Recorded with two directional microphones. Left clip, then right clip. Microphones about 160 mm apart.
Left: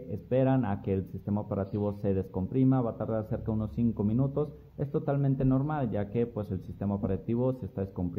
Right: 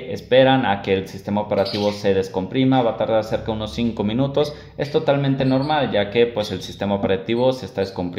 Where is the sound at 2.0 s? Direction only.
35° left (ahead or behind).